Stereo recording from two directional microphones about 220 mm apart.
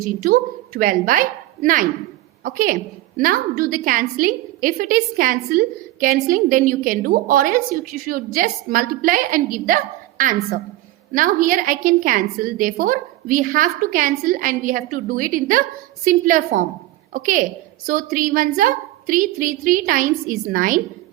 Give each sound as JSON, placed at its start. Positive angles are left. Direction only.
{"t": 0.3, "sound": "a woman's voice", "side_deg": -40}